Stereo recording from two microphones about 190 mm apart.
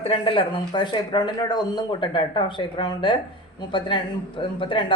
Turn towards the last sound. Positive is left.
turn(degrees=25)  # may be behind; listen again after turning